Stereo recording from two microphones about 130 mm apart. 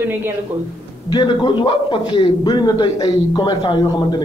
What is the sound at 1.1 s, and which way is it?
A man's voice, 35° left (ahead or behind).